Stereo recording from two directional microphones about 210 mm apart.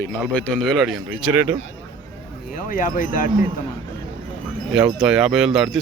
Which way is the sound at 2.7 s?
40° left (ahead or behind).